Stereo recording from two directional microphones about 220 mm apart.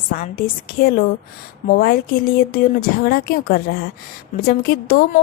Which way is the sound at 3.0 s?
45° left (ahead or behind).